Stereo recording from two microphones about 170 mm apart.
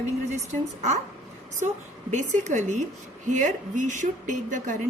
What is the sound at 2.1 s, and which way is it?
A woman's voice, 45° right (ahead or behind).